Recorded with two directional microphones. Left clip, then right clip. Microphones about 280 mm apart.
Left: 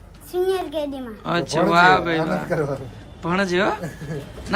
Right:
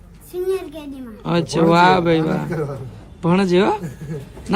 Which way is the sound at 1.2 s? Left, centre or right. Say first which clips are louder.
Right 3 dB; centre.